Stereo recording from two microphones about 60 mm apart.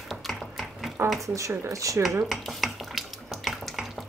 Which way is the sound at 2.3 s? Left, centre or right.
Centre.